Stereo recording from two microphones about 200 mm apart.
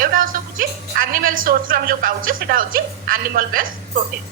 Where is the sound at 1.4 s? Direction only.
45° right (ahead or behind).